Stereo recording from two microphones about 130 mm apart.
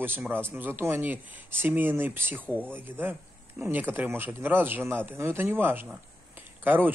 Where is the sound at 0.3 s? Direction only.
15° right (ahead or behind).